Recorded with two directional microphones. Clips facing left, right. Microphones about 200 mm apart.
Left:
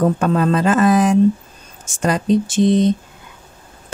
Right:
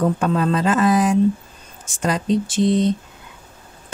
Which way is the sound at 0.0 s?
50° left (ahead or behind).